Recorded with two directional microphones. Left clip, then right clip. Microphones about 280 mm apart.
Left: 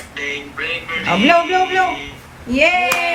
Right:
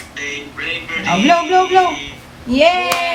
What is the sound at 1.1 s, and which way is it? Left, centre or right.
A woman's voice, centre.